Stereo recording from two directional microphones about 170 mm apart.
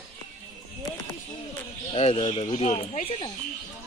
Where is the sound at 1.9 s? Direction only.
30° left (ahead or behind).